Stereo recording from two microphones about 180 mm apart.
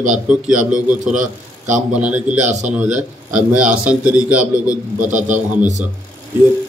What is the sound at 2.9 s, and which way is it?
Speech, 45° right (ahead or behind).